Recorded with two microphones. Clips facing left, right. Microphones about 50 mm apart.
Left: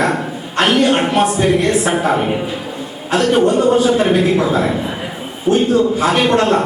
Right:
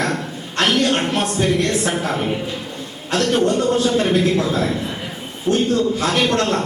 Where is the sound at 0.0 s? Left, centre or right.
Centre.